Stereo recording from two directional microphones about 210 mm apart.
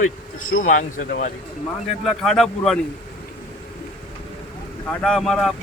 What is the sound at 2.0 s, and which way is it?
Speech, centre (ahead or behind).